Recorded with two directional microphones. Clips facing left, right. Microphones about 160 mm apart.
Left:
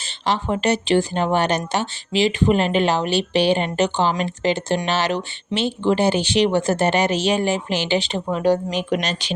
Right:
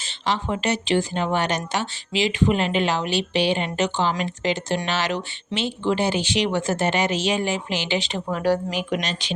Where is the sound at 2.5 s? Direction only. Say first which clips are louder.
Left 4 dB; 45° left (ahead or behind).